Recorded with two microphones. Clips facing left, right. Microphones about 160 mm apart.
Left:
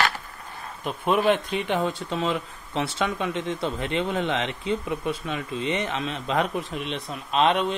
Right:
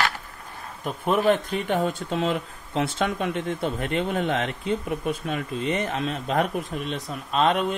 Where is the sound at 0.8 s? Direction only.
45° right (ahead or behind).